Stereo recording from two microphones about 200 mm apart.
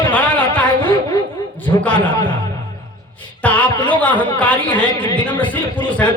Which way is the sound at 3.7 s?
25° left (ahead or behind).